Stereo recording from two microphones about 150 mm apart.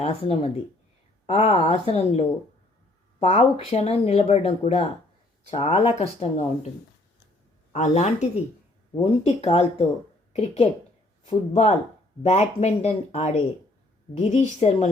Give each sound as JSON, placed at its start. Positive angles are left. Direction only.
{"t": 0.0, "sound": "speech", "side_deg": 45}
{"t": 7.7, "sound": "speech", "side_deg": 50}
{"t": 9.0, "sound": "speech", "side_deg": 40}